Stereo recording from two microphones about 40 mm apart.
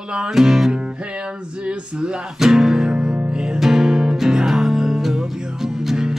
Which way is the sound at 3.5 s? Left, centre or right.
Centre.